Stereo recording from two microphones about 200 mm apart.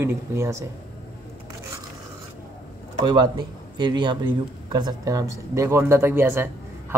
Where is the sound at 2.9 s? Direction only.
20° right (ahead or behind).